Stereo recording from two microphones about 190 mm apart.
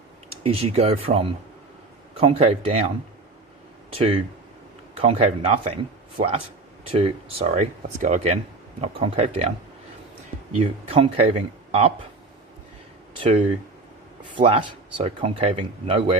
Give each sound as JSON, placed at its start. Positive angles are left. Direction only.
{"t": 0.4, "sound": "speech", "side_deg": -30}
{"t": 3.9, "sound": "speech", "side_deg": -30}
{"t": 10.6, "sound": "speech", "side_deg": -30}
{"t": 14.3, "sound": "speech", "side_deg": -30}